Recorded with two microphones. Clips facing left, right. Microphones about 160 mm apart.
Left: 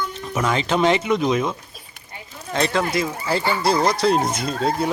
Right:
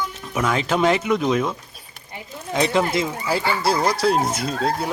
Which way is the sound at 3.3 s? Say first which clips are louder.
Left 1 dB; 5° right (ahead or behind).